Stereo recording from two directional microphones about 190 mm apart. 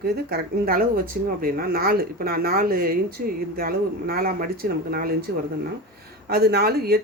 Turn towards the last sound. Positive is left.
turn(degrees=-55)  # may be behind; listen again after turning